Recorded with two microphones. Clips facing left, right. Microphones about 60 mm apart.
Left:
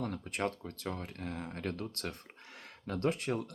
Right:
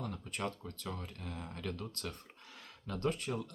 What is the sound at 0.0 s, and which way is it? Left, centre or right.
Speech, left.